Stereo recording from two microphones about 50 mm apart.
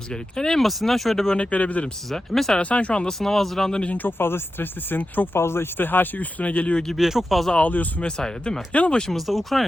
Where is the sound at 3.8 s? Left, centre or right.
Left.